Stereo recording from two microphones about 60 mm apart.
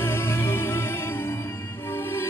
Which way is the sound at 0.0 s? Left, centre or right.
Left.